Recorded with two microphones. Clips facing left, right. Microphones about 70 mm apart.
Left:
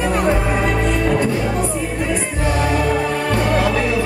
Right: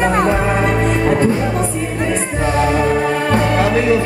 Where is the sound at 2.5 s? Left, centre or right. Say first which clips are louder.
Right 4 dB; right.